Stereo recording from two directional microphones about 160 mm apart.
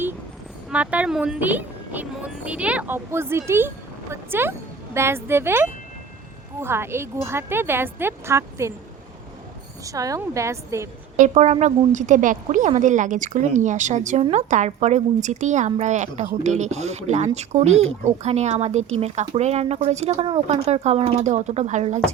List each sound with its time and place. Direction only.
0.7 s speech: 10° right (ahead or behind)
9.8 s a woman's voice: 20° right (ahead or behind)
11.2 s a woman's voice: 45° right (ahead or behind)